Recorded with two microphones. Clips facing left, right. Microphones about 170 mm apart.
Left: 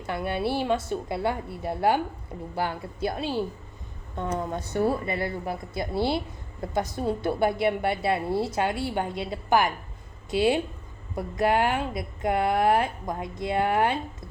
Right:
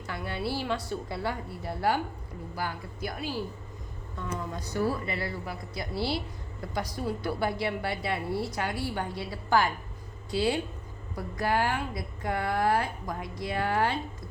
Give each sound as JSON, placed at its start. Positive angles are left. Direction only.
{"t": 0.0, "sound": "speech", "side_deg": 25}
{"t": 4.6, "sound": "speech", "side_deg": 25}
{"t": 5.9, "sound": "speech", "side_deg": 55}
{"t": 6.1, "sound": "speech", "side_deg": 25}